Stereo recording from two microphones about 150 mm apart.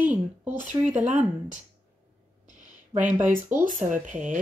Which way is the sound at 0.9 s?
55° right (ahead or behind).